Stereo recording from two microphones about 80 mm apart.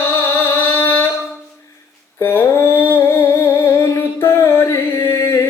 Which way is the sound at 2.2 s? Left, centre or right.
Left.